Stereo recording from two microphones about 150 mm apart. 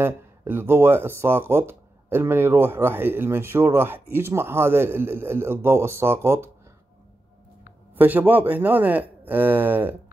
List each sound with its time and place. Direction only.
0.0 s speech: 15° right (ahead or behind)
7.9 s speech: 10° right (ahead or behind)